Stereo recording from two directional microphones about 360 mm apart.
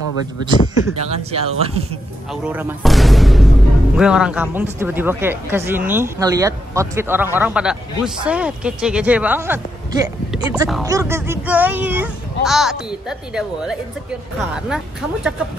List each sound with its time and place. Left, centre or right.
0.8 s speech: centre
2.4 s speech: centre